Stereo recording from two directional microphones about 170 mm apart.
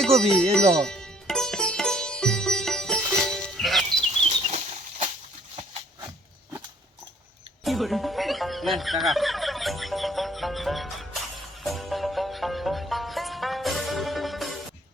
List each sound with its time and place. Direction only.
0.0 s music: centre (ahead or behind)
0.5 s sitar: 5° left (ahead or behind)
4.3 s bird flight: 40° right (ahead or behind)
7.6 s music: centre (ahead or behind)